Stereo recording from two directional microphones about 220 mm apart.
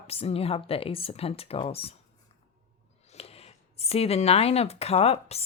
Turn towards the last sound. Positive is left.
turn(degrees=25)  # may be behind; listen again after turning